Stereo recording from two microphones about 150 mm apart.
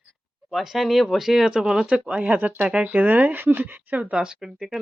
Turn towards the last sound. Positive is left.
turn(degrees=-5)  # may be behind; listen again after turning